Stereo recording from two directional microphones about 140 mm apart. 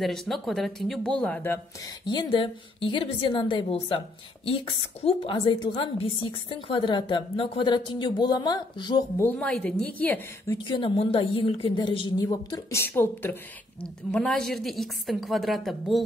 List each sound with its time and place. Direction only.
0.0 s a woman's voice: centre (ahead or behind)
2.0 s a woman's voice: 30° left (ahead or behind)
9.2 s speech: 10° left (ahead or behind)
10.6 s a woman's voice: 35° left (ahead or behind); by 13.4 s 15° left (ahead or behind)
14.1 s a woman's voice: 5° left (ahead or behind)